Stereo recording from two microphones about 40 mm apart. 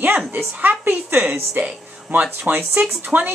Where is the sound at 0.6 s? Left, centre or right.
Right.